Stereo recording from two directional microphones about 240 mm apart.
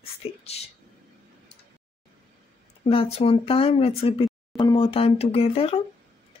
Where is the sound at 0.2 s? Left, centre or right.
Left.